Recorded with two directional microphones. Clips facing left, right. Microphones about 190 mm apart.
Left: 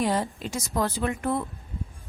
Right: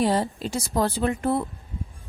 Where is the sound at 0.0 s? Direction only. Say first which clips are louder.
Right 3 dB; 30° right (ahead or behind).